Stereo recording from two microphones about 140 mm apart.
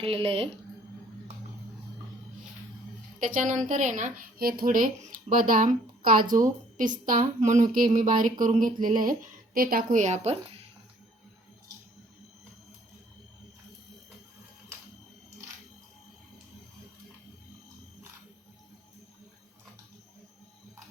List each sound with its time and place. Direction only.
0.0 s a woman's voice: 40° right (ahead or behind)
3.3 s a woman's voice: 60° right (ahead or behind); by 6.2 s 85° right
6.3 s a woman's voice: 70° right (ahead or behind)